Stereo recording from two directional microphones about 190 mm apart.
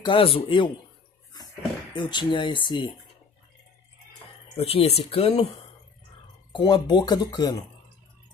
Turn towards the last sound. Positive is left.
turn(degrees=20)  # may be behind; listen again after turning